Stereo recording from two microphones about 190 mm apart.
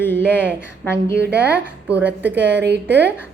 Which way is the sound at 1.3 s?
10° right (ahead or behind).